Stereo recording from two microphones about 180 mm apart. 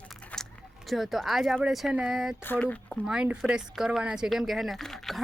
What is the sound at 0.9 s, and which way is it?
Speech, centre (ahead or behind).